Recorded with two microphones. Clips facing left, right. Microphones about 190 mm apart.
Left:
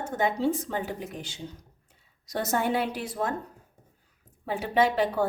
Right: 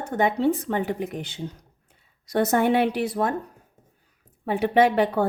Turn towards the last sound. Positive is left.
turn(degrees=-60)  # may be behind; listen again after turning